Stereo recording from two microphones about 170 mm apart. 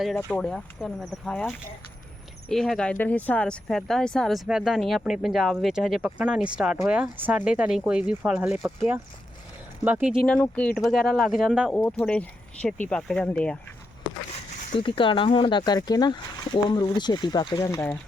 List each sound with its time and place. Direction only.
0.2 s speech: 5° left (ahead or behind)
9.8 s speech: 10° right (ahead or behind)
10.2 s speech: 5° left (ahead or behind)
11.7 s speech: 5° left (ahead or behind)
14.8 s speech: 30° left (ahead or behind)